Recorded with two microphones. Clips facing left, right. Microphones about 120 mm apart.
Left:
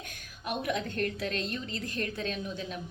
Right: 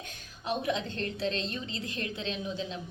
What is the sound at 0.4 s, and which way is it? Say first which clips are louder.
A woman's voice: right 1 dB; 25° right (ahead or behind).